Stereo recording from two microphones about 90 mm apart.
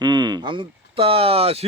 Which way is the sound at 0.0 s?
55° right (ahead or behind).